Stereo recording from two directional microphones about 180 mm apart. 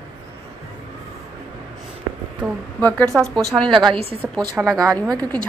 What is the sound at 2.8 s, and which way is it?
Speech, 5° left (ahead or behind).